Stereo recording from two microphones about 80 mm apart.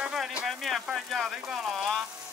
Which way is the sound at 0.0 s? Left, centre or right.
Centre.